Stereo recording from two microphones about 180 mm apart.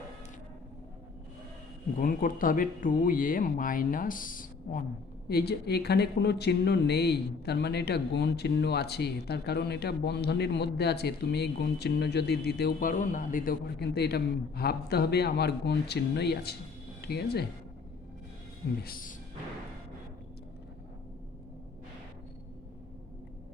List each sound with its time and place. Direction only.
2.0 s speech: 50° left (ahead or behind)
5.3 s speech: 65° left (ahead or behind)
18.8 s speech: 55° left (ahead or behind)